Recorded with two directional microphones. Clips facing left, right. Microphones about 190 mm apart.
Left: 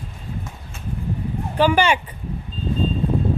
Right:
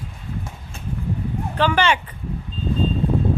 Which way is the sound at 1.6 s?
10° left (ahead or behind).